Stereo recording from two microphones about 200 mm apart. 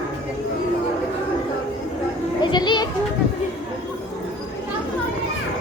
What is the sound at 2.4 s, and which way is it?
Children playing, 20° left (ahead or behind).